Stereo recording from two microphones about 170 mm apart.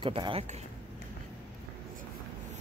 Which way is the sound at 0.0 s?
30° right (ahead or behind).